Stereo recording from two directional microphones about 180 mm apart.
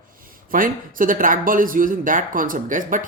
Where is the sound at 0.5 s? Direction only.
50° right (ahead or behind).